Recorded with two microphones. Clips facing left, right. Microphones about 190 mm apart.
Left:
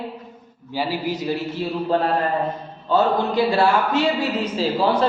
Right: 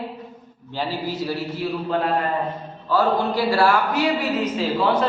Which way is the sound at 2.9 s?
20° left (ahead or behind).